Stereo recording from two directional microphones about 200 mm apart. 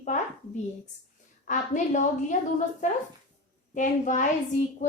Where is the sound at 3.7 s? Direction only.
40° left (ahead or behind).